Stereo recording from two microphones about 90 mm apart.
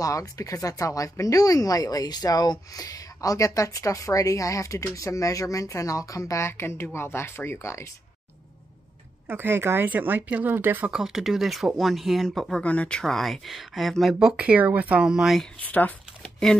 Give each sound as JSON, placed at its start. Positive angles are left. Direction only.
{"t": 0.0, "sound": "speech", "side_deg": 40}
{"t": 9.3, "sound": "speech", "side_deg": -25}
{"t": 10.9, "sound": "speech", "side_deg": -5}
{"t": 12.6, "sound": "speech", "side_deg": 15}
{"t": 13.0, "sound": "speech", "side_deg": 0}
{"t": 14.2, "sound": "speech", "side_deg": -15}
{"t": 15.6, "sound": "speech", "side_deg": 15}